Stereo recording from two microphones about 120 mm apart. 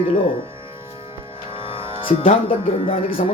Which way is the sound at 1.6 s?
45° left (ahead or behind).